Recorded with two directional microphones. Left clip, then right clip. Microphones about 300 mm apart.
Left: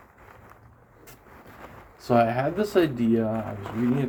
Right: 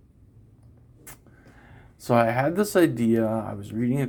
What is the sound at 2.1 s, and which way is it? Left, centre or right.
Speech, right.